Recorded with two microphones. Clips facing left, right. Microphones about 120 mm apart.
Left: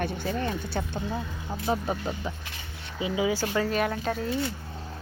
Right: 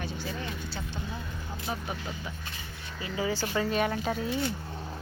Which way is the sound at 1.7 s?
35° left (ahead or behind).